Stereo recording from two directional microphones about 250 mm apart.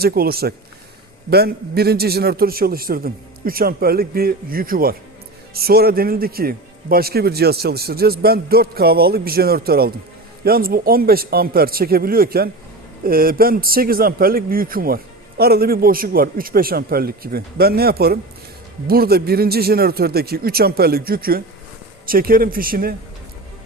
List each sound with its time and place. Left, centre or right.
0.0 s a man's voice: right